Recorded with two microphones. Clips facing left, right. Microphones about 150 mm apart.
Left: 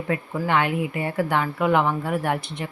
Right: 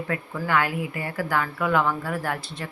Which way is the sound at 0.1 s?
20° left (ahead or behind).